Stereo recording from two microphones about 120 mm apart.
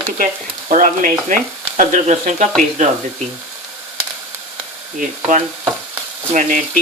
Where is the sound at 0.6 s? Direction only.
90° right.